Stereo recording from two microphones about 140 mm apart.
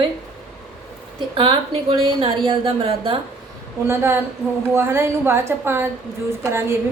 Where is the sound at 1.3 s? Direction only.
40° right (ahead or behind).